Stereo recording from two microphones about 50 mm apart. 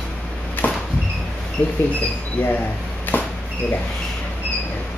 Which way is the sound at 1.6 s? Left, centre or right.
Left.